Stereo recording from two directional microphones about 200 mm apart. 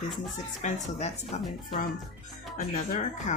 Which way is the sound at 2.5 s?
45° left (ahead or behind).